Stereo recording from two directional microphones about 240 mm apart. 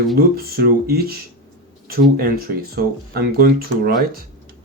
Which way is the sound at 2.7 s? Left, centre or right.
Right.